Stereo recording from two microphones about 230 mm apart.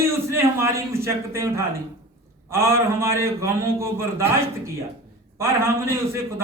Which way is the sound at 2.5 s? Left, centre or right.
Centre.